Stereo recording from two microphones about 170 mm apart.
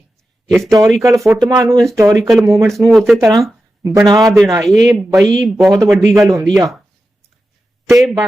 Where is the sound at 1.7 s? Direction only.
Centre (ahead or behind).